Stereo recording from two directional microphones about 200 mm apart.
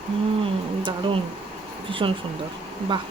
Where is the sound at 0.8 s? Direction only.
25° right (ahead or behind).